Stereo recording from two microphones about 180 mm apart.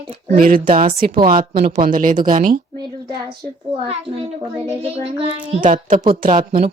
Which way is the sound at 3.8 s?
30° right (ahead or behind).